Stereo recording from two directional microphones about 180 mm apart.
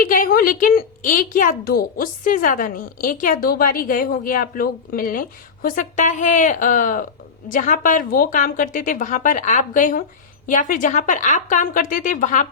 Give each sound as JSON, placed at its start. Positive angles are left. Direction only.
{"t": 0.0, "sound": "speech", "side_deg": 50}